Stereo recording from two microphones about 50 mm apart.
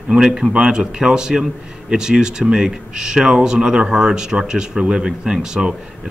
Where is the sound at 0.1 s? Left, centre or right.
Centre.